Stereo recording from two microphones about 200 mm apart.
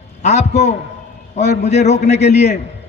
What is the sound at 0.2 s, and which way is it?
A man's voice, 35° left (ahead or behind).